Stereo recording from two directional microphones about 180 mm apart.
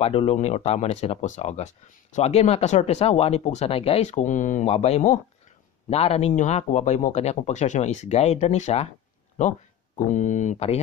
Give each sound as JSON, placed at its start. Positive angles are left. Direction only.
{"t": 0.0, "sound": "speech", "side_deg": 35}